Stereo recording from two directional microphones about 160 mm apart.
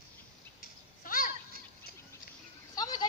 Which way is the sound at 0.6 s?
60° left (ahead or behind).